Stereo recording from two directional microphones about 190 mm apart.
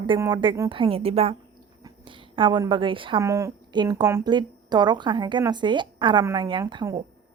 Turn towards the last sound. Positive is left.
turn(degrees=-20)  # may be behind; listen again after turning